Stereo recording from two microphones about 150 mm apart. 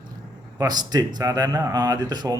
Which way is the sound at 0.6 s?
25° right (ahead or behind).